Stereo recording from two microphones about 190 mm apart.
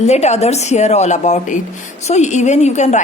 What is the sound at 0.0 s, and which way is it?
A woman's voice, 35° left (ahead or behind).